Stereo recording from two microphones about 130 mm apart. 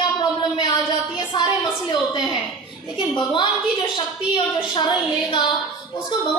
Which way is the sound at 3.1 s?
35° left (ahead or behind).